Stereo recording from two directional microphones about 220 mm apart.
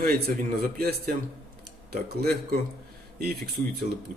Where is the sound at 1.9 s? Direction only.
45° right (ahead or behind).